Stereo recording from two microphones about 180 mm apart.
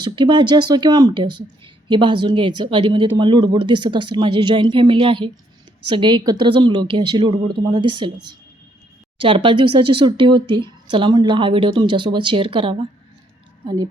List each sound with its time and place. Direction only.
0.0 s speech: 25° right (ahead or behind)
9.1 s speech: 30° right (ahead or behind)